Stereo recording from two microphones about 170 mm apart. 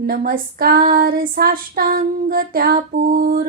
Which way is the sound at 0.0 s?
60° right (ahead or behind).